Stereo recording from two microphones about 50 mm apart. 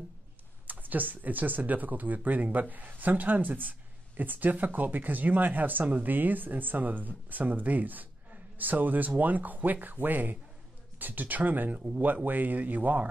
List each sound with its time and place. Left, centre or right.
0.7 s speech: right